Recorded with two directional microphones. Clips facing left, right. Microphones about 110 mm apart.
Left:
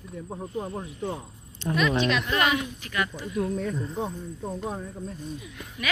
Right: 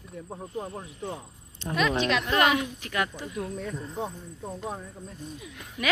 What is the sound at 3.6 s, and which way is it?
Speech, 5° right (ahead or behind).